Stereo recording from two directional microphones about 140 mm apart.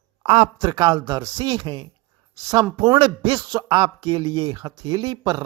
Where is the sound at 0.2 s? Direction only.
40° right (ahead or behind).